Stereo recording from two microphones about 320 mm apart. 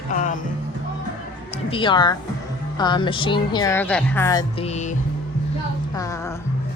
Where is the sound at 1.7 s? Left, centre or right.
Centre.